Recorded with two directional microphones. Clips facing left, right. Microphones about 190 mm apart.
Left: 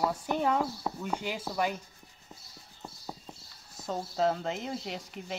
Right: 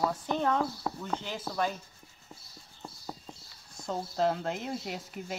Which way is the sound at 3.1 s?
5° left (ahead or behind).